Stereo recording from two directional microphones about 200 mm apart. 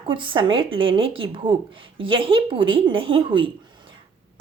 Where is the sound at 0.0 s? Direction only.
25° right (ahead or behind).